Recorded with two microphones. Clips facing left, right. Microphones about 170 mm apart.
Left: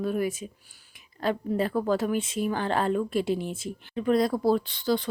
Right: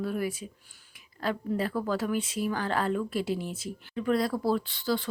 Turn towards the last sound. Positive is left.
turn(degrees=20)  # may be behind; listen again after turning